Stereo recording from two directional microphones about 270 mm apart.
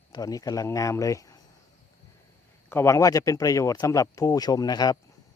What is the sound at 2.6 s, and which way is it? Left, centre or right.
Speech, centre.